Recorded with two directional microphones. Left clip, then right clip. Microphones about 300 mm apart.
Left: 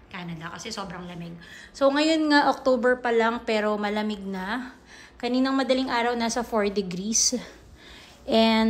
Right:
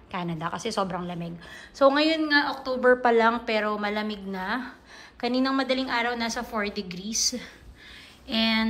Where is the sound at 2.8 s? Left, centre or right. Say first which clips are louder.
Right 8 dB; centre.